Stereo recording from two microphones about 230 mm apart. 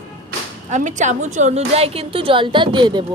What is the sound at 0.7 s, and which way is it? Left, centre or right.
A woman's voice, right.